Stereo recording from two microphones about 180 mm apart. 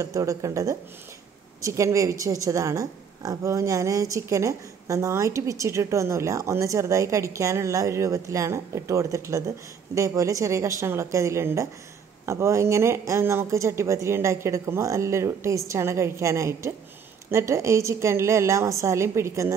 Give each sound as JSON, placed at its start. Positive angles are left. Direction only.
{"t": 0.0, "sound": "a woman's voice", "side_deg": -20}